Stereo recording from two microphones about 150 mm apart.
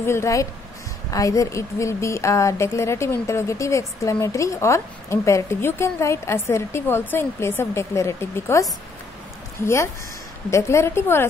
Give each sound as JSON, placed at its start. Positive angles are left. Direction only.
{"t": 0.0, "sound": "a woman's voice", "side_deg": 20}
{"t": 10.5, "sound": "a woman's voice", "side_deg": 20}